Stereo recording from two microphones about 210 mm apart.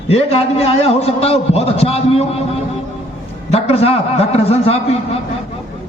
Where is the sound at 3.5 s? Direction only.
30° left (ahead or behind).